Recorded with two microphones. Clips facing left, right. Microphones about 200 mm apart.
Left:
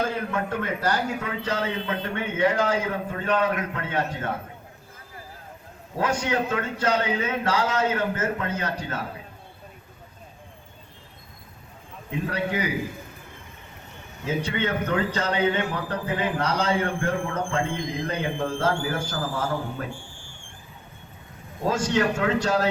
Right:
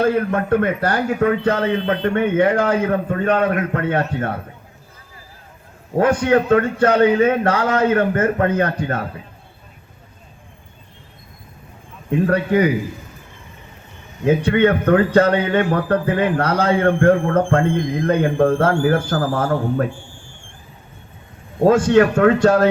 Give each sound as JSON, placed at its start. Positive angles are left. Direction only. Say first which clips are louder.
{"t": 0.0, "sound": "a man's voice", "louder": "right 9 dB", "side_deg": -55}
{"t": 6.0, "sound": "a man's voice", "louder": "right 10 dB", "side_deg": -55}
{"t": 12.1, "sound": "a man's voice", "louder": "right 11 dB", "side_deg": -55}
{"t": 14.3, "sound": "a man's voice", "louder": "right 11 dB", "side_deg": -55}
{"t": 21.6, "sound": "a man's voice", "louder": "right 11 dB", "side_deg": -55}